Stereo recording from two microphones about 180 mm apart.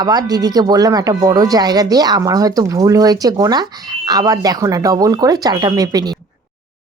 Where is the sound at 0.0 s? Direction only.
20° right (ahead or behind).